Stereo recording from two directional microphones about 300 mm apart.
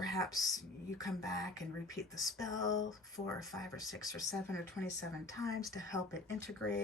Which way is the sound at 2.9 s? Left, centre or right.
Centre.